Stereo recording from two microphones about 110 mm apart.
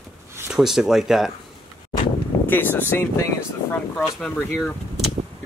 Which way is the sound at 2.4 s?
20° left (ahead or behind).